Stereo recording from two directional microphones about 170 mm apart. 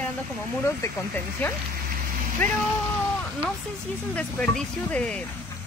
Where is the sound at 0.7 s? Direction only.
15° left (ahead or behind).